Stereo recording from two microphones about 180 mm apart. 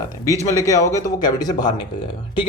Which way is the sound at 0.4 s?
15° left (ahead or behind).